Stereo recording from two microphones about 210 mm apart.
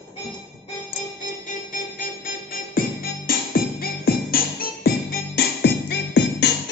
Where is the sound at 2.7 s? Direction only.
45° left (ahead or behind).